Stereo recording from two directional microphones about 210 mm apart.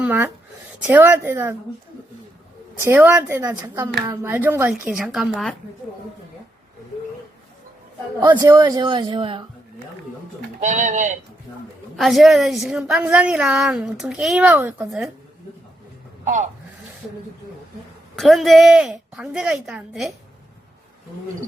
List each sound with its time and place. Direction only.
0.0 s speech: 10° right (ahead or behind)
2.9 s speech: 10° right (ahead or behind)
8.2 s a man's voice: 15° right (ahead or behind)
10.6 s speech: 35° right (ahead or behind)
11.9 s a woman's voice: centre (ahead or behind)
16.2 s speech: 35° right (ahead or behind)
18.2 s a woman's voice: centre (ahead or behind)